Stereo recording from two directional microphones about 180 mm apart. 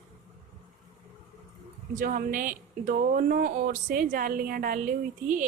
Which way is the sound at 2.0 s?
50° right (ahead or behind).